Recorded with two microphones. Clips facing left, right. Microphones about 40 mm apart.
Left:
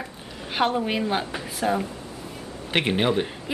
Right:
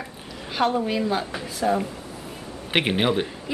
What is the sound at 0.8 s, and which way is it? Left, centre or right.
Speech, left.